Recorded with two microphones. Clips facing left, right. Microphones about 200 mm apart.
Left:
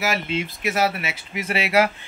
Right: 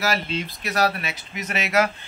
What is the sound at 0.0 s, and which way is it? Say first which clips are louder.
Speech: left 1 dB; 20° left (ahead or behind).